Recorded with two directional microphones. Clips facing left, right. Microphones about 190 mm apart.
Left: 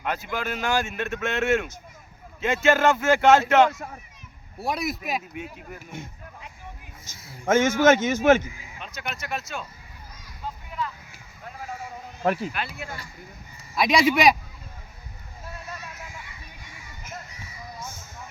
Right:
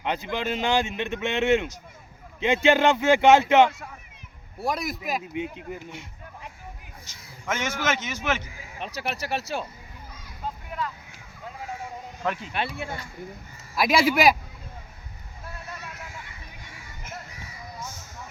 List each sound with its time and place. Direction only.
0.0 s speech: 20° right (ahead or behind)
4.6 s speech: centre (ahead or behind)
5.3 s speech: 20° right (ahead or behind)
7.0 s a man's voice: 50° left (ahead or behind)
9.0 s speech: 35° right (ahead or behind)
12.2 s speech: 35° left (ahead or behind)
12.5 s speech: 30° right (ahead or behind)
13.7 s speech: centre (ahead or behind)